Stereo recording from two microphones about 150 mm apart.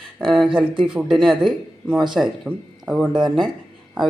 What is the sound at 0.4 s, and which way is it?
Speech, 35° right (ahead or behind).